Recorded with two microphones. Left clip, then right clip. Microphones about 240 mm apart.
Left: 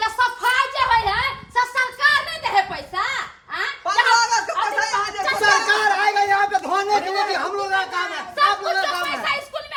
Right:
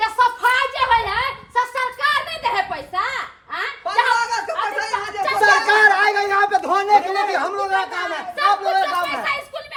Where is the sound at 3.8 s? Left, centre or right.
Centre.